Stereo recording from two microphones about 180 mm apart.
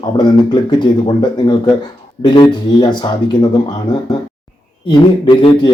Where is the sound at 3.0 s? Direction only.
25° left (ahead or behind).